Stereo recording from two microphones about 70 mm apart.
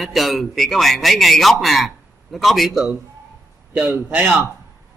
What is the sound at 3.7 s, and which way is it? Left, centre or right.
Speech, right.